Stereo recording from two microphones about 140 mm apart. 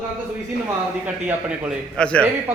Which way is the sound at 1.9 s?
5° left (ahead or behind).